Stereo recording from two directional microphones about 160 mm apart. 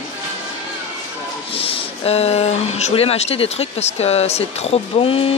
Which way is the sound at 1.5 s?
35° left (ahead or behind).